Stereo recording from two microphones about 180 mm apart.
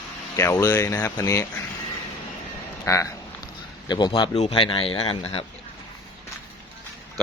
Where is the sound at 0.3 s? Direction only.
15° left (ahead or behind).